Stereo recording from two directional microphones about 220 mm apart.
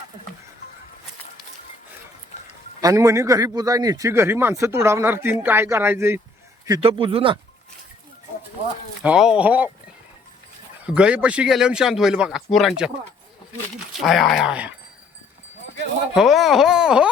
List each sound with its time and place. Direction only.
2.8 s a man's voice: 15° right (ahead or behind)
6.7 s speech: 25° right (ahead or behind)
9.0 s speech: 5° right (ahead or behind)
10.8 s speech: 5° right (ahead or behind)
14.0 s speech: centre (ahead or behind)
16.1 s speech: centre (ahead or behind)